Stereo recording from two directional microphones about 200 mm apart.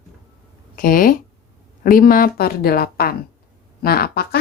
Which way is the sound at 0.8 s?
45° left (ahead or behind).